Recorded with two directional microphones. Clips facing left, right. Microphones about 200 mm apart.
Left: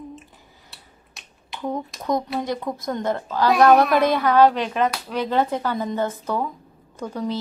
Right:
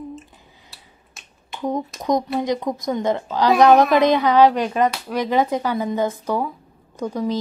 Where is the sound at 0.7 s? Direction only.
Centre (ahead or behind).